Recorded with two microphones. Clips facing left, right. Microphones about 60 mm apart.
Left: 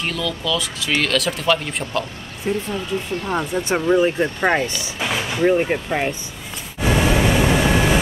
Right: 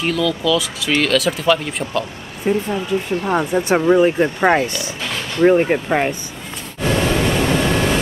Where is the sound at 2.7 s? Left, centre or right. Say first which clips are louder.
Right 4 dB; centre.